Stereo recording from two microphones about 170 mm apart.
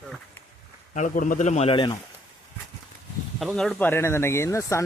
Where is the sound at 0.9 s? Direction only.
50° left (ahead or behind); by 2.0 s 30° left (ahead or behind).